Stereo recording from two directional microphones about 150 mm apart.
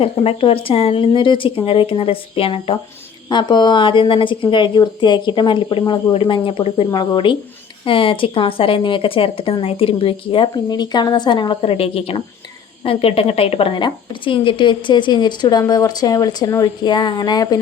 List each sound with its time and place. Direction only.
0.0 s a woman's voice: 35° left (ahead or behind)